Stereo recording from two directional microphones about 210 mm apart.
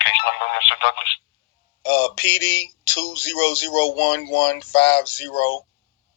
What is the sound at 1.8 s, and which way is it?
Speech, 70° left (ahead or behind).